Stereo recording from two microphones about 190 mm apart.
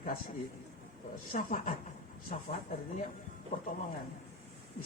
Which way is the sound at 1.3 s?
45° left (ahead or behind).